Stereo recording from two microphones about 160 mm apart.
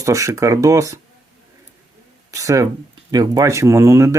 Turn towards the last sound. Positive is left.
turn(degrees=-15)  # may be behind; listen again after turning